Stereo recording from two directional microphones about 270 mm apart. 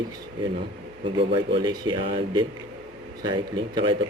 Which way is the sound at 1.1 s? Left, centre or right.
Centre.